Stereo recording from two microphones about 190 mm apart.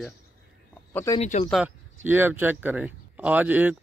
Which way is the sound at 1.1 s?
40° left (ahead or behind).